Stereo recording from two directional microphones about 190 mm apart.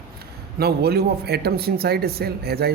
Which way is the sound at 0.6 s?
55° right (ahead or behind).